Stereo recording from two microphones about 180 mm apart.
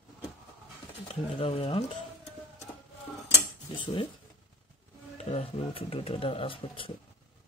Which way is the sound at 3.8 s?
25° left (ahead or behind).